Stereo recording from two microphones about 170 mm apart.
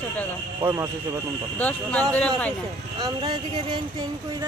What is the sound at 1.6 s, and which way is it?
Speech, 10° left (ahead or behind).